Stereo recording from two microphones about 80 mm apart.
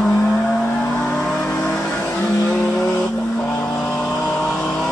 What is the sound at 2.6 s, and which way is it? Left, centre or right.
Vehicle, centre.